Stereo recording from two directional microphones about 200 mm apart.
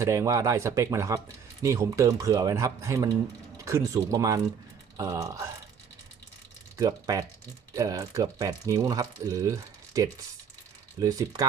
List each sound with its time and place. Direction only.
0.0 s speech: 15° right (ahead or behind)
6.7 s speech: 20° right (ahead or behind)